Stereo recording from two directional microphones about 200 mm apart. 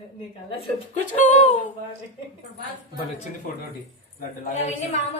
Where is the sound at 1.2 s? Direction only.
35° left (ahead or behind).